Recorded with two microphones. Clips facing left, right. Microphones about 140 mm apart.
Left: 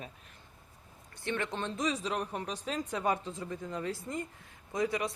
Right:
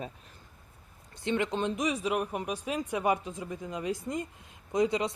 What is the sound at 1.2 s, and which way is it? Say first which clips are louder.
Speech: right 5 dB; 15° right (ahead or behind).